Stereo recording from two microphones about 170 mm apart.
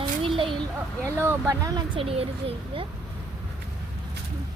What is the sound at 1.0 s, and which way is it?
Speech, 15° right (ahead or behind).